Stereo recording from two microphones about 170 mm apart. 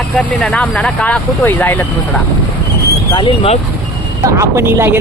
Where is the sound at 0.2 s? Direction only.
5° left (ahead or behind).